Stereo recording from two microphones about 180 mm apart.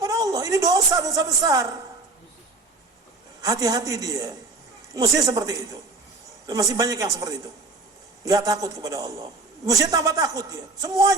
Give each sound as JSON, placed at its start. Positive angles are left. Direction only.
{"t": 0.0, "sound": "speech", "side_deg": -20}
{"t": 3.4, "sound": "speech", "side_deg": -20}